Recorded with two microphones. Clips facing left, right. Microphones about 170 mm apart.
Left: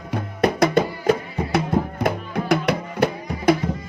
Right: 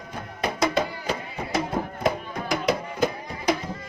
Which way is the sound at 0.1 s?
65° left (ahead or behind).